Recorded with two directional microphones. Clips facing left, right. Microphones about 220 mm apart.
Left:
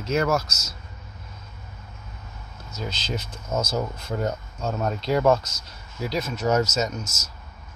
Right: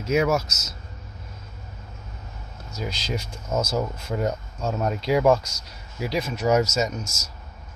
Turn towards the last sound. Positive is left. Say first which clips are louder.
# right 1 dB
turn(degrees=-35)  # may be behind; listen again after turning